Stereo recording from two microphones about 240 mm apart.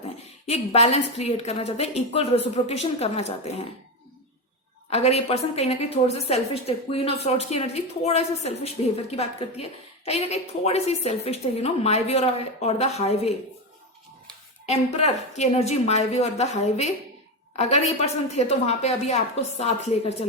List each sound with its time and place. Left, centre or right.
0.0 s a woman's voice: left
4.9 s a woman's voice: left
14.7 s a woman's voice: left